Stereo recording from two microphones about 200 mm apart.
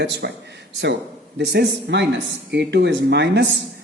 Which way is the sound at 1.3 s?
55° right (ahead or behind).